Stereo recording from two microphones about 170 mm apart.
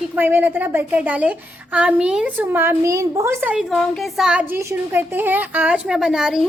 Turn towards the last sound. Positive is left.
turn(degrees=0)  # may be behind; listen again after turning